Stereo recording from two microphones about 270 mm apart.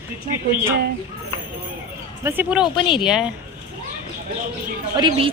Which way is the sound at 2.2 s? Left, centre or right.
Centre.